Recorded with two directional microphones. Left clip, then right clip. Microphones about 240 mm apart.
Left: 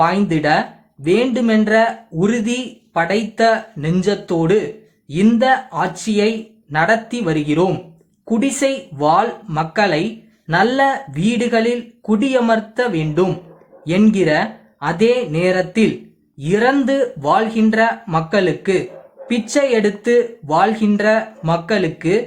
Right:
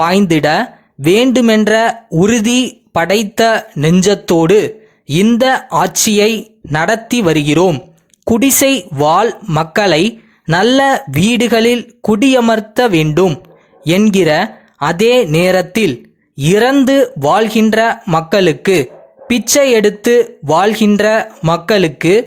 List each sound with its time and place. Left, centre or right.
0.0 s speech: right